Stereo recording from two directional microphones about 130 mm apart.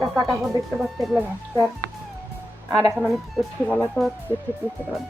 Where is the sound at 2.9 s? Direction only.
Centre (ahead or behind).